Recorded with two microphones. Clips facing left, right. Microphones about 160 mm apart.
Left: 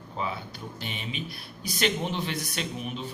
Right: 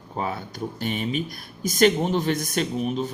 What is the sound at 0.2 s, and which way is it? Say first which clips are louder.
Speech: right 5 dB; 45° right (ahead or behind).